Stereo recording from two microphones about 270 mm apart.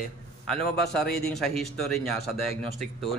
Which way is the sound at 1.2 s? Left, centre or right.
Centre.